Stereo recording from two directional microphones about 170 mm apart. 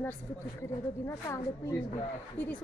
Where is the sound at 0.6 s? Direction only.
15° left (ahead or behind).